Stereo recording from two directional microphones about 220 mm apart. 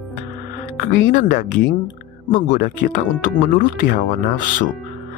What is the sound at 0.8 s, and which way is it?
Speech, 35° left (ahead or behind).